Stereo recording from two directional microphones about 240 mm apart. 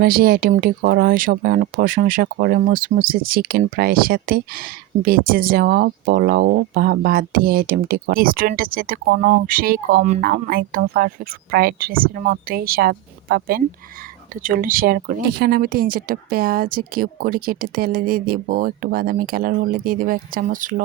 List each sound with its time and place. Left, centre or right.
0.0 s speech: right